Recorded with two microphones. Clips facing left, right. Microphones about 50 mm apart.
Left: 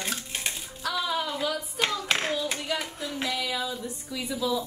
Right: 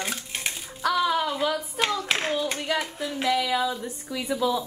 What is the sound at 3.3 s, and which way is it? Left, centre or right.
A woman's voice, right.